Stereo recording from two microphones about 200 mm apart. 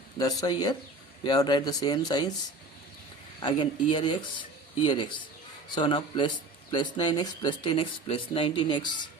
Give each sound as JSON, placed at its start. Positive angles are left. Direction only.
{"t": 0.2, "sound": "speech", "side_deg": 20}
{"t": 3.4, "sound": "speech", "side_deg": 25}